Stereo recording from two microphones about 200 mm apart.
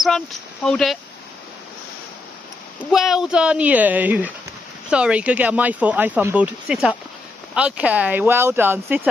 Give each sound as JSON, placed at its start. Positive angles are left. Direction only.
{"t": 0.7, "sound": "speech", "side_deg": 0}
{"t": 2.8, "sound": "speech", "side_deg": 0}